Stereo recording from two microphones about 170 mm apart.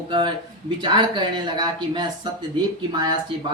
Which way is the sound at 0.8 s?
25° right (ahead or behind).